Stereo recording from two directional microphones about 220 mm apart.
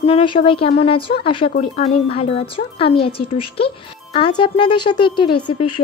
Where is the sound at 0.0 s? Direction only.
25° left (ahead or behind).